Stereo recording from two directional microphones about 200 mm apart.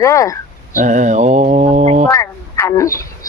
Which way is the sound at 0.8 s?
40° right (ahead or behind).